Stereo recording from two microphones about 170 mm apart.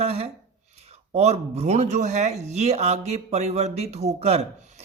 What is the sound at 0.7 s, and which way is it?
Speech, 40° right (ahead or behind).